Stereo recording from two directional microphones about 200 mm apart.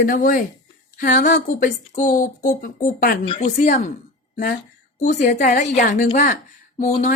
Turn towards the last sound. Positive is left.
turn(degrees=40)  # may be behind; listen again after turning